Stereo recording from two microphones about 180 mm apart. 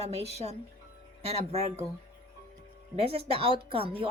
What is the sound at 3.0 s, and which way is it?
Speech, 35° right (ahead or behind).